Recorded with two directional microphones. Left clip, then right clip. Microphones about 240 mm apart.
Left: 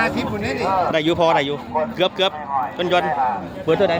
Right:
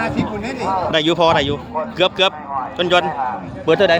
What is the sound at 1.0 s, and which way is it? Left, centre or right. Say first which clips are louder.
A man's voice: right 2 dB; centre.